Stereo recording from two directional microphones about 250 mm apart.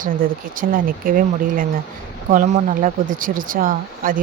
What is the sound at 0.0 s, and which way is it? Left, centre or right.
Speech, right.